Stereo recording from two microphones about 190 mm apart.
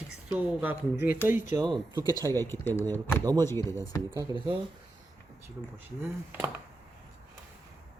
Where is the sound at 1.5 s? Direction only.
20° right (ahead or behind).